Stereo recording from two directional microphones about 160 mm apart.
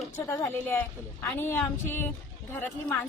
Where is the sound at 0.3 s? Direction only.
15° left (ahead or behind).